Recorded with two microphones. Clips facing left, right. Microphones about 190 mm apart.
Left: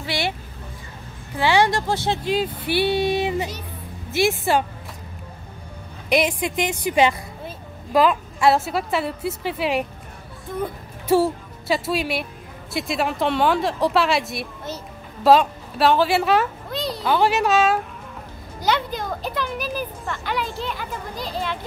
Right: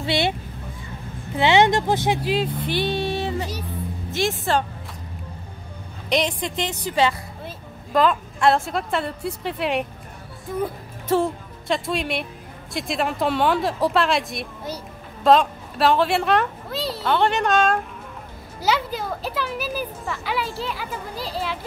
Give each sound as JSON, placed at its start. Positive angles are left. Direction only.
{"t": 0.0, "sound": "speech", "side_deg": -25}
{"t": 2.2, "sound": "speech", "side_deg": 0}
{"t": 6.0, "sound": "speech", "side_deg": 10}
{"t": 7.4, "sound": "a woman's voice", "side_deg": 5}
{"t": 11.1, "sound": "speech", "side_deg": 5}
{"t": 18.6, "sound": "speech", "side_deg": -5}